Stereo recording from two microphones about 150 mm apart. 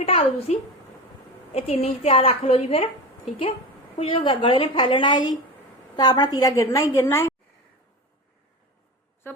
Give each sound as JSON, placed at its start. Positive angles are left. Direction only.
{"t": 0.0, "sound": "a woman's voice", "side_deg": 40}
{"t": 1.5, "sound": "a woman's voice", "side_deg": 40}
{"t": 3.9, "sound": "a woman's voice", "side_deg": 35}
{"t": 9.2, "sound": "a woman's voice", "side_deg": 15}